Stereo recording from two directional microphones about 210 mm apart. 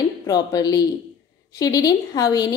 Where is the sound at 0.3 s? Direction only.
20° left (ahead or behind).